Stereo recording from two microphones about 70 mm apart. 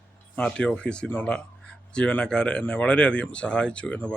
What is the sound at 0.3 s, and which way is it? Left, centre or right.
Speech, centre.